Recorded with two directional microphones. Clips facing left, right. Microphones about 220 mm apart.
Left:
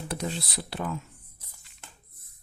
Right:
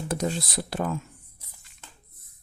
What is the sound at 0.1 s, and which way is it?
Speech, 45° right (ahead or behind).